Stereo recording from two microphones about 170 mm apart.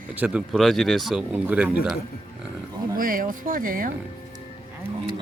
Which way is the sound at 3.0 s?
55° right (ahead or behind).